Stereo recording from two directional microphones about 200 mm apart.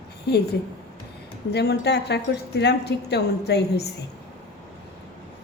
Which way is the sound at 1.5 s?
55° left (ahead or behind).